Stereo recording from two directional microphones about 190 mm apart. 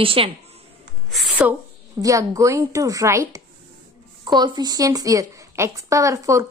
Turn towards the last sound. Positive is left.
turn(degrees=-15)  # may be behind; listen again after turning